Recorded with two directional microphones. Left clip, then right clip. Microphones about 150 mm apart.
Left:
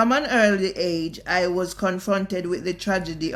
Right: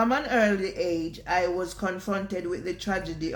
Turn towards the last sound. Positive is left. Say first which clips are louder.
# left 5 dB
turn(degrees=45)  # may be behind; listen again after turning